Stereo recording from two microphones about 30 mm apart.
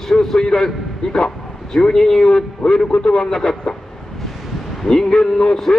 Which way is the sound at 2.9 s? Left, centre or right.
Left.